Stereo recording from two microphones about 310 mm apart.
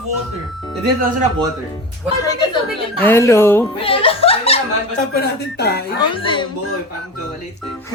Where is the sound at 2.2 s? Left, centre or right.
Centre.